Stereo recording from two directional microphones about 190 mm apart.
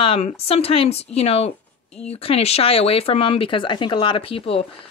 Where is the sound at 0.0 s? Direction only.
30° left (ahead or behind).